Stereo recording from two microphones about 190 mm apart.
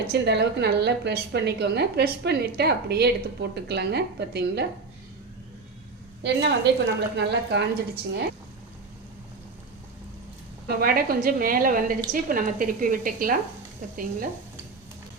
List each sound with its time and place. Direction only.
0.1 s a woman's voice: 60° right (ahead or behind)
6.2 s a woman's voice: 60° right (ahead or behind)
10.7 s a woman's voice: 55° right (ahead or behind)